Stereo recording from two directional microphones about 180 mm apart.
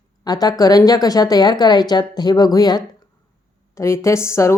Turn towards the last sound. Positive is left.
turn(degrees=15)  # may be behind; listen again after turning